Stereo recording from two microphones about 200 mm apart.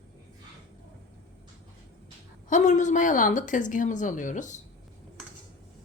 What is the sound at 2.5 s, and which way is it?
A woman's voice, 35° left (ahead or behind).